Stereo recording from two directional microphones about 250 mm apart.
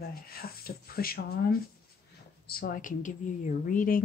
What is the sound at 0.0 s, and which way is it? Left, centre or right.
Speech, left.